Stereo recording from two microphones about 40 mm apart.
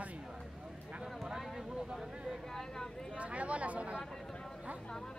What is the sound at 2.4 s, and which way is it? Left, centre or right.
Vehicle, centre.